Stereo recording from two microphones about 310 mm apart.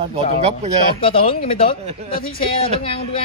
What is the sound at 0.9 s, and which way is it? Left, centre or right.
Speech, centre.